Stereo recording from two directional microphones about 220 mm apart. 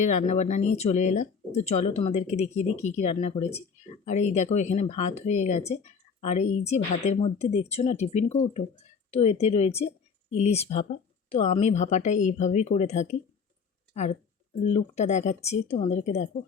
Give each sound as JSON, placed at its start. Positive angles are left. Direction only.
{"t": 0.0, "sound": "speech", "side_deg": 30}